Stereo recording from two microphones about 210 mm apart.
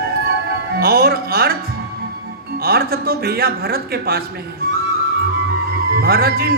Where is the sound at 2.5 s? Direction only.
45° right (ahead or behind).